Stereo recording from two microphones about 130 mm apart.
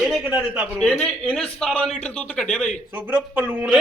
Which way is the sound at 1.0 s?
5° left (ahead or behind).